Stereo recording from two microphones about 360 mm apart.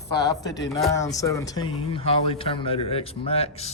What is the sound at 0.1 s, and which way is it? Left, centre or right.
Speech, centre.